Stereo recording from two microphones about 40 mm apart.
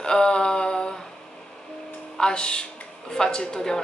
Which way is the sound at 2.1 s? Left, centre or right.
Centre.